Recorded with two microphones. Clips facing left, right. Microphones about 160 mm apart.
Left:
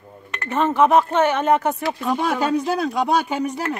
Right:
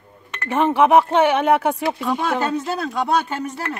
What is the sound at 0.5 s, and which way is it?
Speech, 10° right (ahead or behind).